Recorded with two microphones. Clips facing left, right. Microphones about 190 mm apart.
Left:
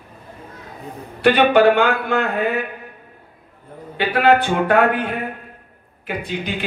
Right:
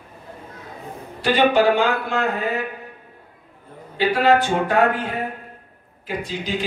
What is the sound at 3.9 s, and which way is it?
A man's voice, 60° left (ahead or behind).